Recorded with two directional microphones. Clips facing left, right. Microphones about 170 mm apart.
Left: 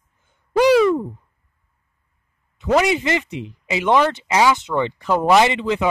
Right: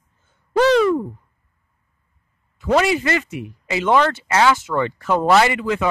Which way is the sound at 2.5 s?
20° left (ahead or behind).